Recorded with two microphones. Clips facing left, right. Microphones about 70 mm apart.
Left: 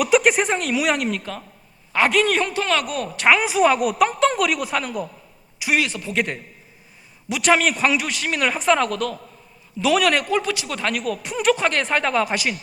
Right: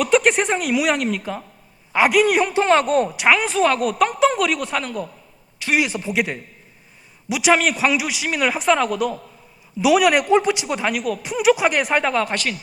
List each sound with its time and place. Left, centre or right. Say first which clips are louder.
0.0 s a man's voice: even; centre
1.2 s a man's voice: right 4 dB; centre; by 3.1 s right
3.2 s a man's voice: left 3 dB; centre
5.8 s speech: right 3 dB; centre
6.1 s a man's voice: left 1 dB; centre
10.9 s a man's voice: right 2 dB; centre